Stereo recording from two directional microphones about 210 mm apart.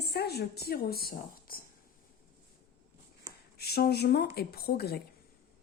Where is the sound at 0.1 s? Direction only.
50° left (ahead or behind).